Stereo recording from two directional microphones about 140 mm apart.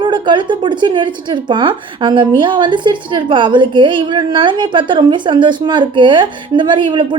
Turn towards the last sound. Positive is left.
turn(degrees=-35)  # may be behind; listen again after turning